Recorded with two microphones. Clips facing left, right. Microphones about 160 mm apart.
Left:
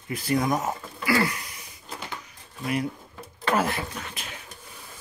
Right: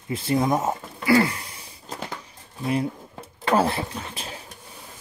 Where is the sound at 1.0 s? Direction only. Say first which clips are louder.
Right 5 dB; 30° right (ahead or behind).